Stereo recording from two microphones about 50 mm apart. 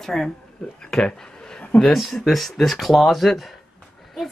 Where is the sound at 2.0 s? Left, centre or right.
Centre.